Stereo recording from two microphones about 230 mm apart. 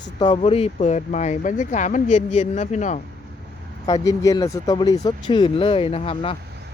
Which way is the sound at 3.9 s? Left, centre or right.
Centre.